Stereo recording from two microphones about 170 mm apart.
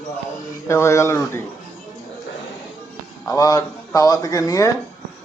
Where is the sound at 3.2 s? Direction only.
20° left (ahead or behind).